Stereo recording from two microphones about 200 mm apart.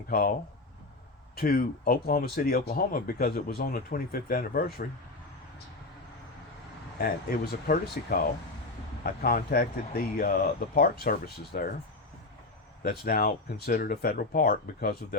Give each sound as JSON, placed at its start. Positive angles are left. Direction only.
{"t": 0.1, "sound": "speech", "side_deg": 45}
{"t": 1.4, "sound": "speech", "side_deg": 45}
{"t": 7.0, "sound": "speech", "side_deg": 50}
{"t": 12.8, "sound": "speech", "side_deg": 50}